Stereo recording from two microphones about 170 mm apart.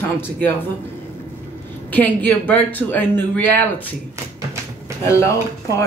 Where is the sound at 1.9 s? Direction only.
10° left (ahead or behind).